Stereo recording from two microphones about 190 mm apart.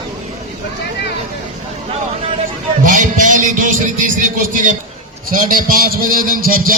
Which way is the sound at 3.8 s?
45° right (ahead or behind).